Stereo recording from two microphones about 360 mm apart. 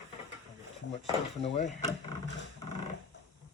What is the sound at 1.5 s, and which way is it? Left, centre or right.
Speech, centre.